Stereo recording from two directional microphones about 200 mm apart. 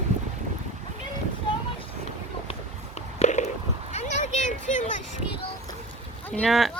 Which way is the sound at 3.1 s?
35° left (ahead or behind).